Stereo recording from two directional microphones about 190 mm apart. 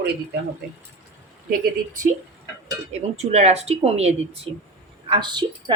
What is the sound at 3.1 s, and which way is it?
A woman's voice, 35° right (ahead or behind).